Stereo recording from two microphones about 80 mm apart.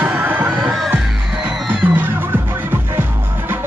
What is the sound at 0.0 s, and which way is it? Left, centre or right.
Music, right.